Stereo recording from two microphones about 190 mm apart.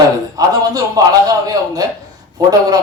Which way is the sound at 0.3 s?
20° right (ahead or behind).